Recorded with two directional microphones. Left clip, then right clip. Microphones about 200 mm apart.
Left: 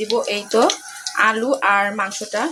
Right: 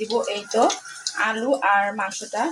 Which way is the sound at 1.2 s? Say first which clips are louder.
Left 5 dB; 25° left (ahead or behind).